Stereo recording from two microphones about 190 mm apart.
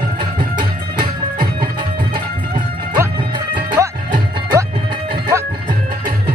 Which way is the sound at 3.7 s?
20° right (ahead or behind).